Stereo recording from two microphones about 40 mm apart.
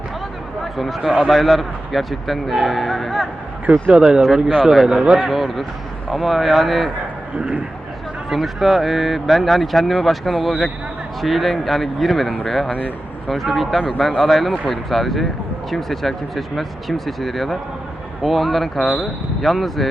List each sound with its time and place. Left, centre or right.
0.6 s a man's voice: centre
3.7 s speech: right
4.4 s a man's voice: centre
4.6 s a man's voice: centre
8.3 s a man's voice: centre